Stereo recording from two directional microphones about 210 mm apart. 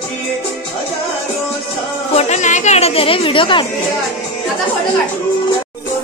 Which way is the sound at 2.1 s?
30° left (ahead or behind).